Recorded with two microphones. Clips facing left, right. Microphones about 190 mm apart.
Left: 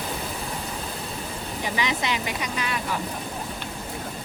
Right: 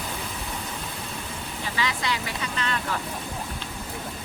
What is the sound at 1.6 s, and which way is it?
Speech, 20° left (ahead or behind).